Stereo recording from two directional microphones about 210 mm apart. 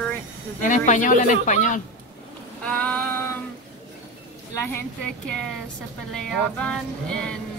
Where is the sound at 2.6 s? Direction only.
5° left (ahead or behind).